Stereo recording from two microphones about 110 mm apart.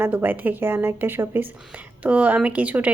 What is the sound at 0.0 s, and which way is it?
Speech, 20° right (ahead or behind).